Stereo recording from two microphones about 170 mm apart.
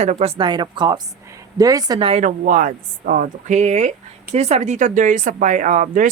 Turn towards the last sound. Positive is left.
turn(degrees=-50)  # may be behind; listen again after turning